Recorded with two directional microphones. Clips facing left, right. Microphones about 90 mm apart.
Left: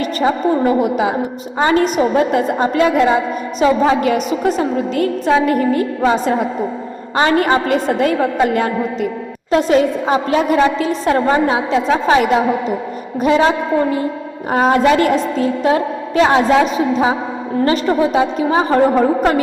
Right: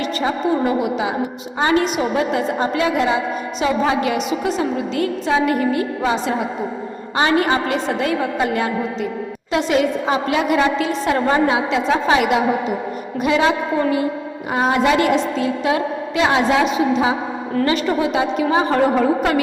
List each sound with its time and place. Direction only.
0.0 s a woman's voice: 40° left (ahead or behind)
13.2 s a woman's voice: 35° left (ahead or behind)
14.5 s a woman's voice: 40° left (ahead or behind)